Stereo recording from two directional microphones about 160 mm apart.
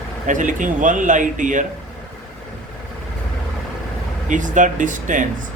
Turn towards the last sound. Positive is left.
turn(degrees=-55)  # may be behind; listen again after turning